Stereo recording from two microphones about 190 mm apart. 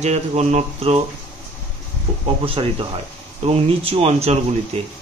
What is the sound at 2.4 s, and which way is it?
Speech, 30° right (ahead or behind).